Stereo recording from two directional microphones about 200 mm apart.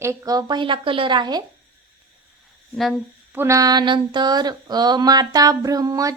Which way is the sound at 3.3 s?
15° right (ahead or behind).